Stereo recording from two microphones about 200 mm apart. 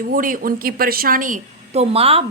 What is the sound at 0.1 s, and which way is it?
A woman's voice, 45° right (ahead or behind).